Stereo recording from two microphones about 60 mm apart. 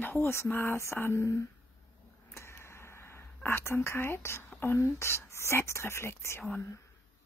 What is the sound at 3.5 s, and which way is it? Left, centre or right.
Speech, left.